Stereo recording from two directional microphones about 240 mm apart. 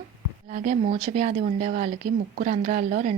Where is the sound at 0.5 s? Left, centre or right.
Right.